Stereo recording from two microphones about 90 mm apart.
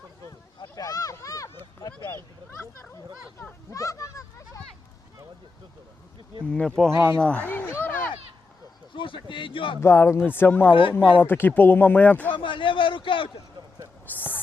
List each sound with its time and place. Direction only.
0.8 s boat: 40° left (ahead or behind)
3.7 s a sound: 40° left (ahead or behind)
6.4 s speech: 10° left (ahead or behind)
6.9 s speech: 30° right (ahead or behind)
7.2 s a sound: 10° left (ahead or behind)
9.0 s a man's voice: 70° left (ahead or behind)
9.8 s speech: 30° left (ahead or behind)
12.4 s a man's voice: 70° left (ahead or behind)
14.1 s a sound: 20° left (ahead or behind)